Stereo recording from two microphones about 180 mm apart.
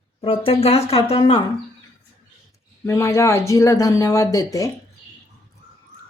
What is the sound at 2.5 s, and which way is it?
Speech, 15° left (ahead or behind).